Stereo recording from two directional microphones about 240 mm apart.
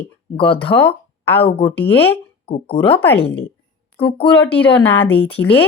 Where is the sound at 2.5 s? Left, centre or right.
Left.